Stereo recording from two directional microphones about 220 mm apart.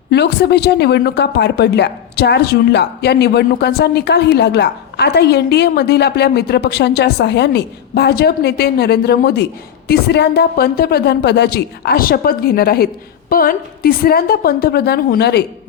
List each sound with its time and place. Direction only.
0.1 s a woman's voice: 50° left (ahead or behind)